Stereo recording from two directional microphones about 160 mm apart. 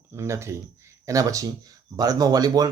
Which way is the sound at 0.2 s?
15° right (ahead or behind).